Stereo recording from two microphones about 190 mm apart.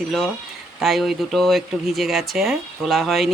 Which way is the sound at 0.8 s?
Centre (ahead or behind).